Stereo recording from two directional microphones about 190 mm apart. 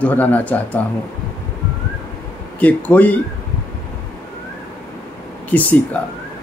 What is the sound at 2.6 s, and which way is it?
Speech, 10° left (ahead or behind).